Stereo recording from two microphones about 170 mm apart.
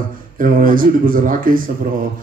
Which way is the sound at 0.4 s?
55° right (ahead or behind).